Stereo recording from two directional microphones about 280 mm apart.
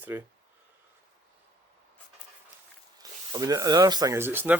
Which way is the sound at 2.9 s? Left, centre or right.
Centre.